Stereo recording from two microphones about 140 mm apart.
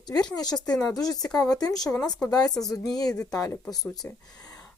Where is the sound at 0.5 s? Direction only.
5° left (ahead or behind).